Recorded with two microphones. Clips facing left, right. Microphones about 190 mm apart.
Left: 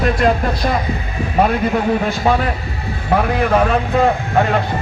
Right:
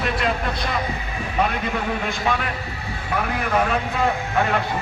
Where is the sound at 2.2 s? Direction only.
40° left (ahead or behind).